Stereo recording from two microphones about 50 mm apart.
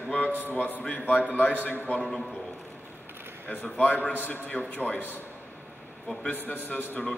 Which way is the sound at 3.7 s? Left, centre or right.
Left.